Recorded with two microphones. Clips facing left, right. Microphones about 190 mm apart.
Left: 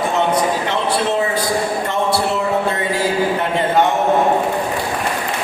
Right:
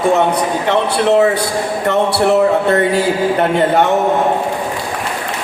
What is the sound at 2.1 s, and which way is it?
A man's voice, 70° right (ahead or behind).